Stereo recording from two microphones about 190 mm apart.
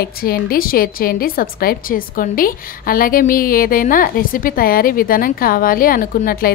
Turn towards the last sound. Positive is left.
turn(degrees=50)  # may be behind; listen again after turning